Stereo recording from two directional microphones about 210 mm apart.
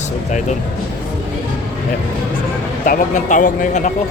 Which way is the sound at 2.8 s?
40° left (ahead or behind).